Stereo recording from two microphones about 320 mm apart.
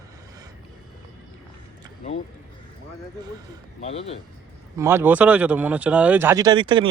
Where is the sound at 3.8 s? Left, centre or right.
Centre.